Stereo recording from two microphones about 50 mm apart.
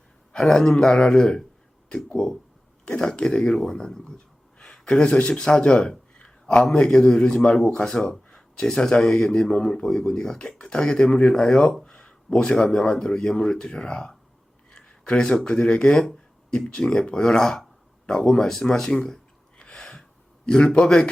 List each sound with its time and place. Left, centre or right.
0.3 s speech: centre
19.5 s gasp: centre
20.5 s speech: centre